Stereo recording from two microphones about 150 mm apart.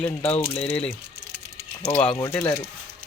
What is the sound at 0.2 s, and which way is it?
Speech, 35° left (ahead or behind).